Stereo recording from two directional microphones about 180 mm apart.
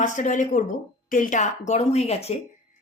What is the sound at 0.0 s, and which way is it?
A woman's voice, 45° left (ahead or behind).